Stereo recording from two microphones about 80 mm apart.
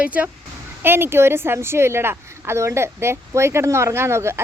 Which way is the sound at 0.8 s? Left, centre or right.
Right.